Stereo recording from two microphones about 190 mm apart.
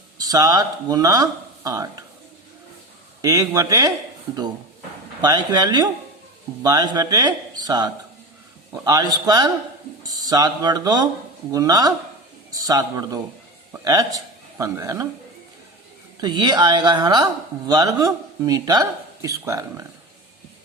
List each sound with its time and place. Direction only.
0.2 s speech: 20° right (ahead or behind)
3.2 s speech: 15° right (ahead or behind)
5.2 s a man's voice: 20° right (ahead or behind)
16.2 s speech: 25° right (ahead or behind)